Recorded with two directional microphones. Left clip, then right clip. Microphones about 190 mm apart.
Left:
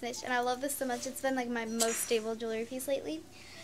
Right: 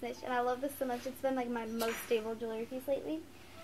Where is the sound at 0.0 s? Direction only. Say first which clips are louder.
Left 2 dB; 15° left (ahead or behind).